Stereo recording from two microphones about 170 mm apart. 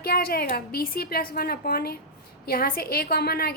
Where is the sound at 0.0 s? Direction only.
60° left (ahead or behind).